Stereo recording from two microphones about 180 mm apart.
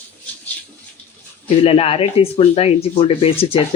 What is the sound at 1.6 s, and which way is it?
Speech, 35° left (ahead or behind).